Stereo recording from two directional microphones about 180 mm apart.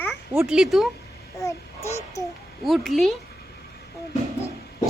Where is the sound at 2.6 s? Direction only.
Centre (ahead or behind).